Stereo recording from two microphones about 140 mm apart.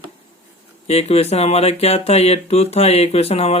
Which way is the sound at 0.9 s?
50° left (ahead or behind).